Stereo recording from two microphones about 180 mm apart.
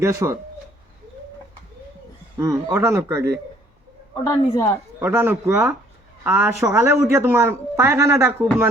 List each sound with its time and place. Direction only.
0.0 s speech: 15° right (ahead or behind)
2.4 s speech: 15° right (ahead or behind)
4.1 s a woman's voice: 25° left (ahead or behind)
4.9 s speech: 10° right (ahead or behind)